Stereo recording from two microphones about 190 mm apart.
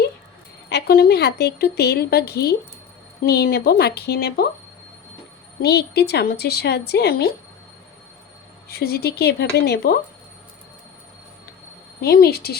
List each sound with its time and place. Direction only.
0.7 s a woman's voice: 60° left (ahead or behind)
5.6 s a woman's voice: 60° left (ahead or behind)
8.7 s a woman's voice: 55° left (ahead or behind)
12.0 s a woman's voice: 55° left (ahead or behind)